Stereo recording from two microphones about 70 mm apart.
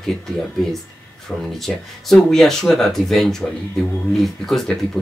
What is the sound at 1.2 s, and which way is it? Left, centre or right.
Speech, centre.